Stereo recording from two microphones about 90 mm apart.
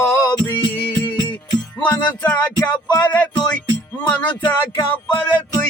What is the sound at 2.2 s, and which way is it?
Music, 10° left (ahead or behind).